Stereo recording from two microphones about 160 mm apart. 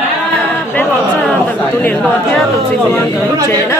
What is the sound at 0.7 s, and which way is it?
Speech, 10° left (ahead or behind).